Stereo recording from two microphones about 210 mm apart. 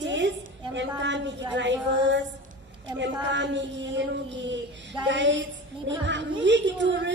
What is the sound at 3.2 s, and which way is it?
A woman's voice, 60° right (ahead or behind).